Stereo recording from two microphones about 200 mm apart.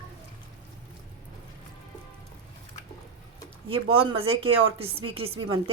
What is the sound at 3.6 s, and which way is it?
A woman's voice, 25° right (ahead or behind).